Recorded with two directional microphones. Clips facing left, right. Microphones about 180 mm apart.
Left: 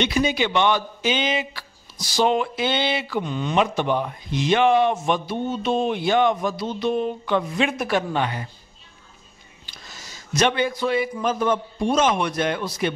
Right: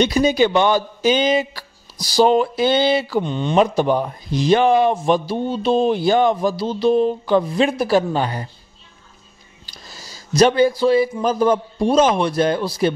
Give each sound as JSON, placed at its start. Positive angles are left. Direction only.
{"t": 0.0, "sound": "a man's voice", "side_deg": -40}
{"t": 9.7, "sound": "a man's voice", "side_deg": -35}